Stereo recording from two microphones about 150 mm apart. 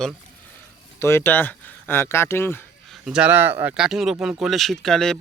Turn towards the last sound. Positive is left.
turn(degrees=5)  # may be behind; listen again after turning